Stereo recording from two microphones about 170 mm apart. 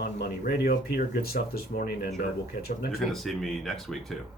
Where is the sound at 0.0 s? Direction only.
70° left (ahead or behind).